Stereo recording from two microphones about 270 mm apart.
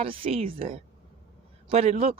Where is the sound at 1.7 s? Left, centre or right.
Right.